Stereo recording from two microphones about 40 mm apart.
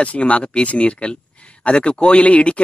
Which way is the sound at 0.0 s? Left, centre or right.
Left.